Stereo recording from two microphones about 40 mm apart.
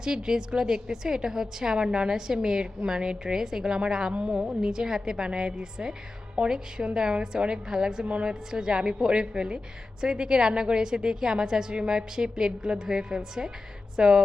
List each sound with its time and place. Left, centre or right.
0.0 s a woman's voice: centre
8.0 s a woman's voice: right
8.3 s a woman's voice: centre